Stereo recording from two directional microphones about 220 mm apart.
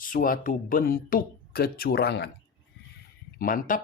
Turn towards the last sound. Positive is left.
turn(degrees=40)  # may be behind; listen again after turning